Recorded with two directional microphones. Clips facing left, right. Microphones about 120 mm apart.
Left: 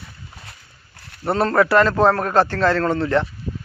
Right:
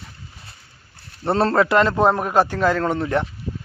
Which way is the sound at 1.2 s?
30° right (ahead or behind).